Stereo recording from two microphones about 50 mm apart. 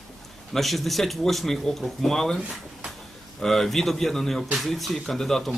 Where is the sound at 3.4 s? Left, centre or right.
Centre.